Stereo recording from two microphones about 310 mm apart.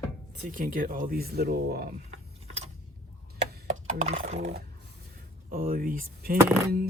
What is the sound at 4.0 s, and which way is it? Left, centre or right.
Speech, right.